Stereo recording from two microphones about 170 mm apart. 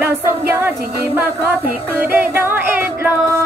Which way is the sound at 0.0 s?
10° right (ahead or behind).